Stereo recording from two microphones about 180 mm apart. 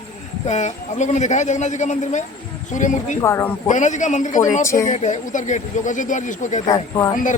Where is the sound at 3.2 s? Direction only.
15° left (ahead or behind).